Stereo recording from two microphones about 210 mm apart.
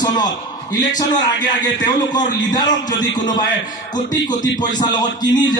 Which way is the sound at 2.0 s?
20° left (ahead or behind).